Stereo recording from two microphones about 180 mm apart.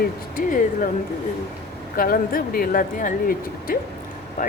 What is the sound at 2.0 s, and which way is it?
Speech, 55° left (ahead or behind).